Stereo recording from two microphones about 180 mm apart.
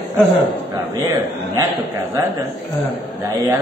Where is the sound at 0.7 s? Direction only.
15° right (ahead or behind).